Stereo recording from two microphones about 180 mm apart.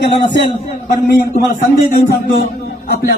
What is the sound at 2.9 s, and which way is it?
Speech, 60° left (ahead or behind).